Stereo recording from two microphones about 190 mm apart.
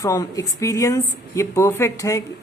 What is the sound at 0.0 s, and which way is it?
Speech, 20° left (ahead or behind).